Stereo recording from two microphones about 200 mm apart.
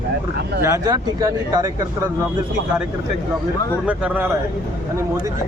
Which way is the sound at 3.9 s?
5° right (ahead or behind).